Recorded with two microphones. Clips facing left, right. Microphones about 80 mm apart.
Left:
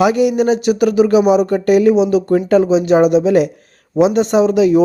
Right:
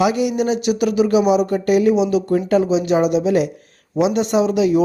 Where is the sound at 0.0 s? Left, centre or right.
Left.